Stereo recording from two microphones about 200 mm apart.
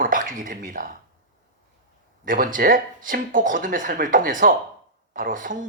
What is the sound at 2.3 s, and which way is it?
Speech, 45° right (ahead or behind).